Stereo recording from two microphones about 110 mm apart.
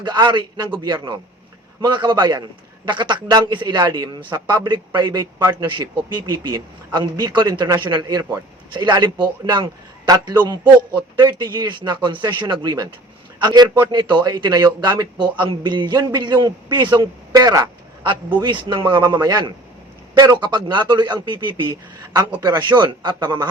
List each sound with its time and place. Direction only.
0.0 s a man's voice: 45° right (ahead or behind)
18.0 s a man's voice: 50° right (ahead or behind)